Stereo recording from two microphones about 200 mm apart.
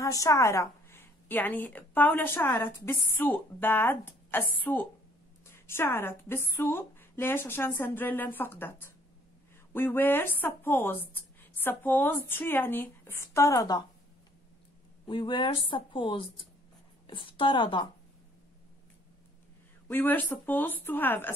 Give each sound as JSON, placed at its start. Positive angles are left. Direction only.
{"t": 0.0, "sound": "a woman's voice", "side_deg": 15}
{"t": 15.0, "sound": "a woman's voice", "side_deg": 25}
{"t": 19.9, "sound": "a woman's voice", "side_deg": 10}